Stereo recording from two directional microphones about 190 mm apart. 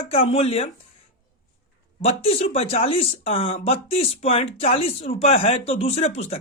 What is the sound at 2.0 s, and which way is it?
Speech, 30° left (ahead or behind).